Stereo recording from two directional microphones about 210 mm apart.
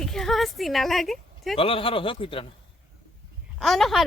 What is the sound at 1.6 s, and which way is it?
Speech, 25° left (ahead or behind).